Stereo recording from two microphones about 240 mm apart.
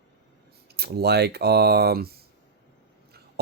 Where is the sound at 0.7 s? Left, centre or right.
Right.